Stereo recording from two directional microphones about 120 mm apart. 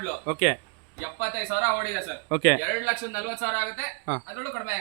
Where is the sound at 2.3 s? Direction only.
15° right (ahead or behind).